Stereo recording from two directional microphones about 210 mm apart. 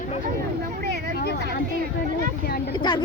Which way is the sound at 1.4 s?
50° right (ahead or behind).